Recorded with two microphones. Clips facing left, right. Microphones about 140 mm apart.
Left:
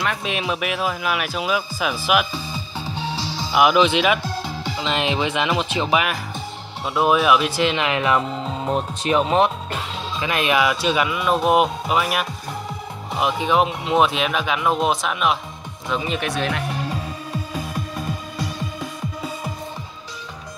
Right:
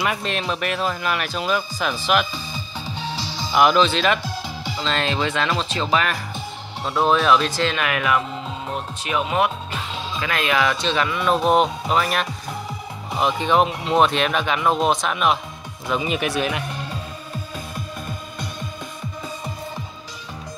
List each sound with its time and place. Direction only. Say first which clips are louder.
0.2 s speech: left 1 dB; 5° left (ahead or behind)
3.0 s music: left 2 dB; 5° left (ahead or behind)
4.7 s speech: left 1 dB; 15° left (ahead or behind)
10.2 s speech: left 2 dB; 20° left (ahead or behind); by 16.6 s 5° right (ahead or behind)